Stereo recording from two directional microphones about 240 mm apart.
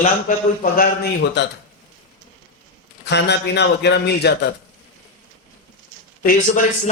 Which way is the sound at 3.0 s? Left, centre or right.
Left.